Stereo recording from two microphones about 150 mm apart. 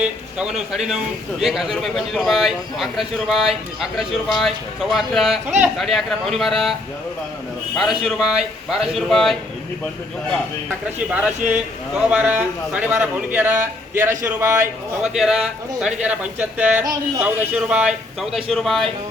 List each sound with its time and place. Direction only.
0.0 s speech: 5° right (ahead or behind)
7.8 s speech: centre (ahead or behind)
11.1 s a man's voice: 10° right (ahead or behind)
15.0 s a man's voice: 5° right (ahead or behind)